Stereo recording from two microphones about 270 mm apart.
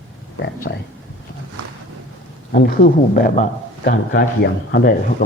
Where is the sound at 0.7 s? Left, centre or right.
Left.